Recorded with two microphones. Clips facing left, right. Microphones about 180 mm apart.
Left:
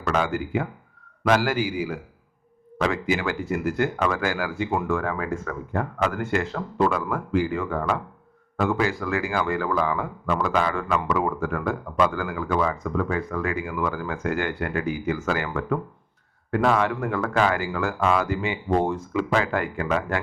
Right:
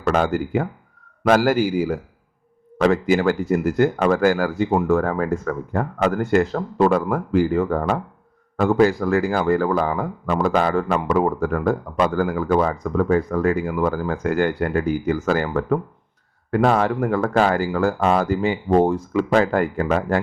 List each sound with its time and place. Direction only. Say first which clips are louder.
0.1 s a man's voice: right 5 dB; 45° right (ahead or behind)